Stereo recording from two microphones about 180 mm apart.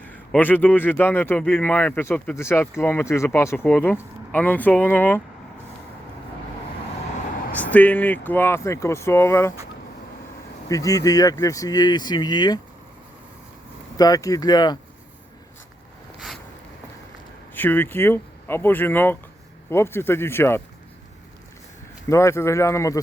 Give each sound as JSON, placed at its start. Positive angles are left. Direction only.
{"t": 0.1, "sound": "speech", "side_deg": 10}
{"t": 7.5, "sound": "speech", "side_deg": 10}
{"t": 10.7, "sound": "speech", "side_deg": 20}
{"t": 13.9, "sound": "speech", "side_deg": 20}
{"t": 17.5, "sound": "speech", "side_deg": 10}
{"t": 22.1, "sound": "speech", "side_deg": 15}